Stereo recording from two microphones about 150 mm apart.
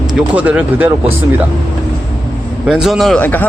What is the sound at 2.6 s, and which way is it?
Speech, 5° right (ahead or behind).